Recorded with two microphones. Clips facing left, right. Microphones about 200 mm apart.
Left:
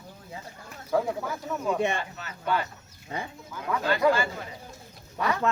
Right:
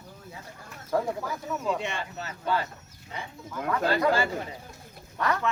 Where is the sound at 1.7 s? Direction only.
55° left (ahead or behind).